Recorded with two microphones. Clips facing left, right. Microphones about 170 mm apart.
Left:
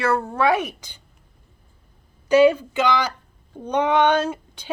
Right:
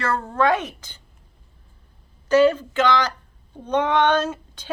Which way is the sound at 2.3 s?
10° left (ahead or behind).